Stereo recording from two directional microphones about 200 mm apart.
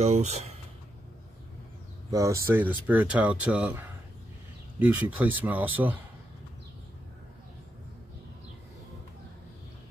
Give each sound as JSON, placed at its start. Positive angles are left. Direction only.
{"t": 0.0, "sound": "speech", "side_deg": -35}
{"t": 2.0, "sound": "speech", "side_deg": -15}